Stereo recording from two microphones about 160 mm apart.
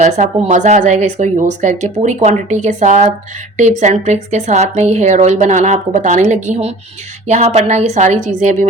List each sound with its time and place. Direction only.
0.0 s speech: 50° right (ahead or behind)